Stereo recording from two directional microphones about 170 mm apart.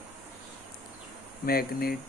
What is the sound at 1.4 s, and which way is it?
Speech, 60° left (ahead or behind).